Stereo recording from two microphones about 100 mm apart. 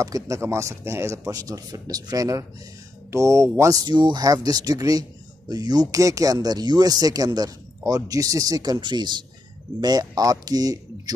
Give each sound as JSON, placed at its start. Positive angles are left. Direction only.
{"t": 0.0, "sound": "speech", "side_deg": -30}